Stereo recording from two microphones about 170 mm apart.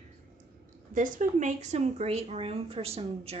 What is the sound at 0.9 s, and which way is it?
A woman's voice, 50° right (ahead or behind).